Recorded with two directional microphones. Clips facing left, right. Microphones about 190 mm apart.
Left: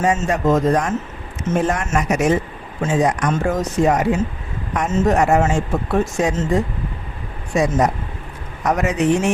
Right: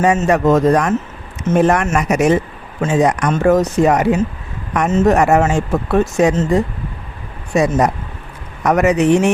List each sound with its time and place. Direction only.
0.0 s speech: 65° right (ahead or behind)
7.5 s speech: 70° right (ahead or behind)